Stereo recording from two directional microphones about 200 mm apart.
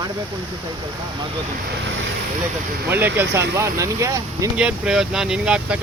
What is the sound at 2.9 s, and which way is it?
Speech, 10° right (ahead or behind).